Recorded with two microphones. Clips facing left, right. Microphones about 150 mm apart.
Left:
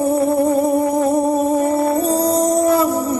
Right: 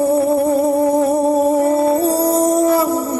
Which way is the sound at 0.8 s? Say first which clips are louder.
Right 2 dB; 20° right (ahead or behind).